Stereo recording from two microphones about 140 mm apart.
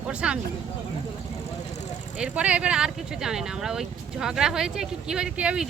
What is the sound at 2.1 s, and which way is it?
Speech, 10° right (ahead or behind).